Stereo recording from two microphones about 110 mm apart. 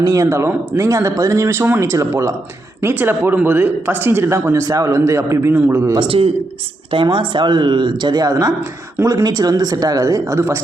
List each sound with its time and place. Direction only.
0.1 s speech: 25° right (ahead or behind)
6.0 s a man's voice: 60° right (ahead or behind); by 10.6 s 25° right (ahead or behind)